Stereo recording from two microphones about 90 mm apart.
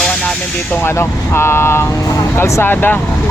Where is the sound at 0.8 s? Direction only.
30° left (ahead or behind).